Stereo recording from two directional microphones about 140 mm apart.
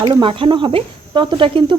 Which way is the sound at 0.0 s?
35° right (ahead or behind).